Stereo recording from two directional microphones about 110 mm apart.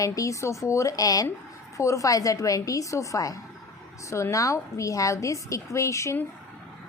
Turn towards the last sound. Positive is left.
turn(degrees=25)  # may be behind; listen again after turning